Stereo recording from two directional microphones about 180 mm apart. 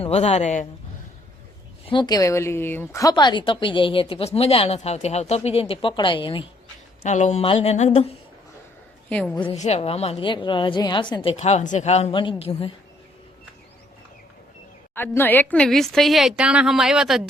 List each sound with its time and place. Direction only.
0.0 s a woman's voice: 35° left (ahead or behind)
1.9 s a woman's voice: 25° left (ahead or behind)
7.0 s a woman's voice: 40° left (ahead or behind)
9.0 s a woman's voice: 5° left (ahead or behind)
9.5 s a woman's voice: 35° left (ahead or behind)
14.9 s a woman's voice: 10° left (ahead or behind)